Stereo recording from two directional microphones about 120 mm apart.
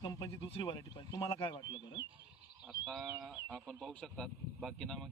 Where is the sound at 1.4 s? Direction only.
45° left (ahead or behind).